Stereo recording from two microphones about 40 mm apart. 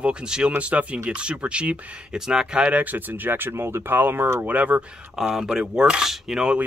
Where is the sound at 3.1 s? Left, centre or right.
Right.